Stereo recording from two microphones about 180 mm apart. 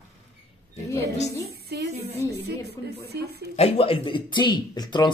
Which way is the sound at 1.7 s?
65° right (ahead or behind).